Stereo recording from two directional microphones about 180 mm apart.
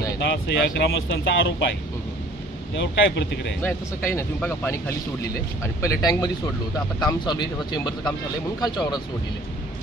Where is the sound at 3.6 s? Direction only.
15° left (ahead or behind).